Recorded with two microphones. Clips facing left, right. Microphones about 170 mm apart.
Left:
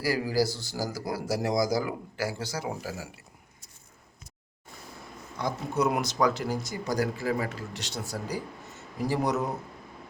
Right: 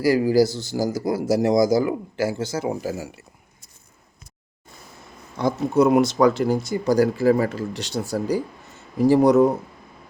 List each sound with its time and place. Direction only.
0.0 s a man's voice: 20° right (ahead or behind)
5.4 s a man's voice: 30° right (ahead or behind)